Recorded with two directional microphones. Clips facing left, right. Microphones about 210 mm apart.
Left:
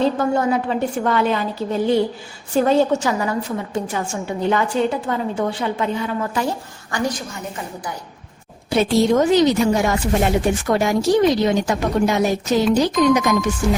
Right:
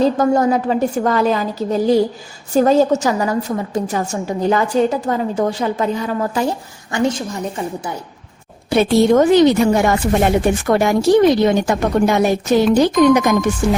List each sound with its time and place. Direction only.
0.0 s a woman's voice: 40° right (ahead or behind)
6.9 s a woman's voice: 25° right (ahead or behind)
8.7 s a woman's voice: 60° right (ahead or behind)